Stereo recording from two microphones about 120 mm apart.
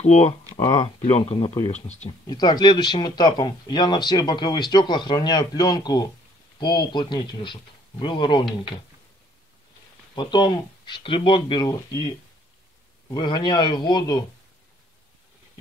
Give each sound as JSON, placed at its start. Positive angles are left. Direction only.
{"t": 0.0, "sound": "speech", "side_deg": 70}
{"t": 1.7, "sound": "speech", "side_deg": 70}
{"t": 2.2, "sound": "speech", "side_deg": 35}
{"t": 10.1, "sound": "speech", "side_deg": 40}
{"t": 13.1, "sound": "speech", "side_deg": 40}